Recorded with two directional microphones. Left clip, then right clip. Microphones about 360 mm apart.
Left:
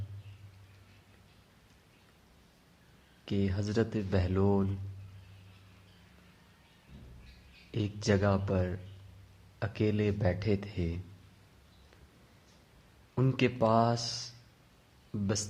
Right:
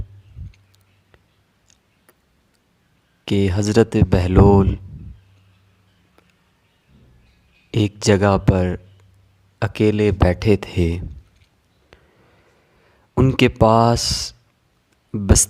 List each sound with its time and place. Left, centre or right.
3.2 s speech: right
7.7 s speech: right
13.1 s speech: right